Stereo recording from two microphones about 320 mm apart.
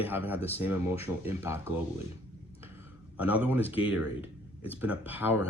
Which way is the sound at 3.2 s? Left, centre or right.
Centre.